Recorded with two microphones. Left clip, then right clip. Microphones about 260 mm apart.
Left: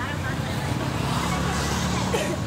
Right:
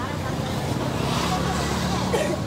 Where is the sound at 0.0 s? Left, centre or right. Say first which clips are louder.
Right 1 dB; right.